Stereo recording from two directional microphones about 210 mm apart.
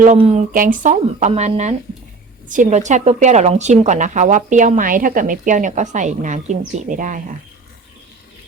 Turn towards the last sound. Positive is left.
turn(degrees=-40)  # may be behind; listen again after turning